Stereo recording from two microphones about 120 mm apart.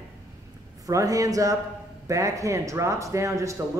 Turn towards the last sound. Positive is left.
turn(degrees=-25)  # may be behind; listen again after turning